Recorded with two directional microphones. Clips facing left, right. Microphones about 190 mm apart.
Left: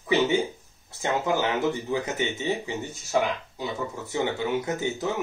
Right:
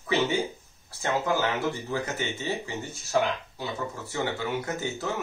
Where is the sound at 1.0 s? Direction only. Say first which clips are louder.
Left 1 dB; 20° left (ahead or behind).